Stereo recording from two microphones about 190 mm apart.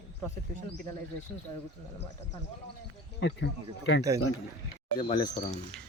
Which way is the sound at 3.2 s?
70° left (ahead or behind).